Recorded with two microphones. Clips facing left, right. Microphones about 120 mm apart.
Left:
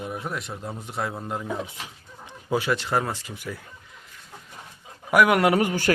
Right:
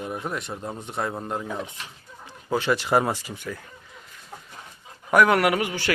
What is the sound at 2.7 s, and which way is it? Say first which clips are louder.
Speech: right 3 dB; 10° right (ahead or behind).